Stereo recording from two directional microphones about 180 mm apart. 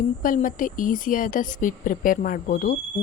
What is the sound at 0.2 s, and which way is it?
Speech, 50° left (ahead or behind).